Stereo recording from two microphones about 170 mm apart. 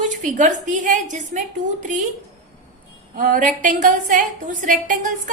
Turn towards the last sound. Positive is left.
turn(degrees=-50)  # may be behind; listen again after turning